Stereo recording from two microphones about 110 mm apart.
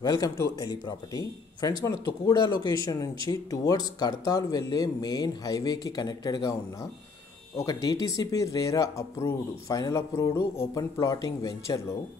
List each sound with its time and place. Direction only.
0.0 s speech: 35° left (ahead or behind)